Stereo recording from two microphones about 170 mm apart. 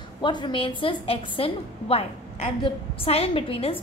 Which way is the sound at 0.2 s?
25° left (ahead or behind).